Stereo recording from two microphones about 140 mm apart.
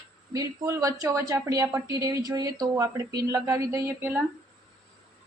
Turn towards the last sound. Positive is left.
turn(degrees=-15)  # may be behind; listen again after turning